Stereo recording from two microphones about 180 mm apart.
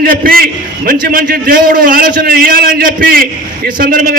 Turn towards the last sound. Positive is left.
turn(degrees=-50)  # may be behind; listen again after turning